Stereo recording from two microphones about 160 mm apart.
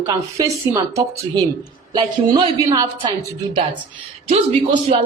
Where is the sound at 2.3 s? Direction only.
25° right (ahead or behind).